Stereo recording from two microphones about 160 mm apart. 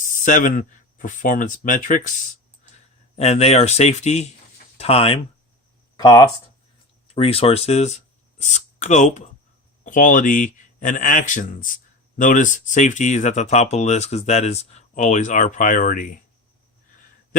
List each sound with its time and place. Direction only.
0.0 s speech: 55° left (ahead or behind)
3.2 s speech: 40° left (ahead or behind)
6.0 s speech: 25° left (ahead or behind)
7.1 s speech: 35° left (ahead or behind); by 16.2 s 55° left (ahead or behind)